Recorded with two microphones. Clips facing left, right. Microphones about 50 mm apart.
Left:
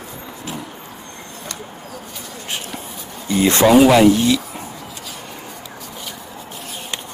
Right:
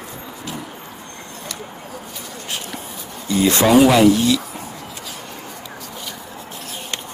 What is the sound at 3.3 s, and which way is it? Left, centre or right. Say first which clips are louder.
Speech: left 2 dB; left.